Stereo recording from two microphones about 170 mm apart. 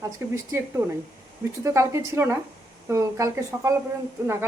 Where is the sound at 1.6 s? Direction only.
15° right (ahead or behind).